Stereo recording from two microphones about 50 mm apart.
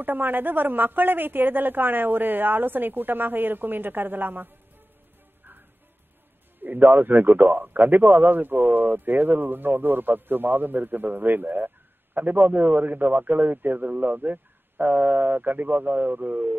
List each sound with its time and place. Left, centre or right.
0.0 s speech: right
6.6 s speech: right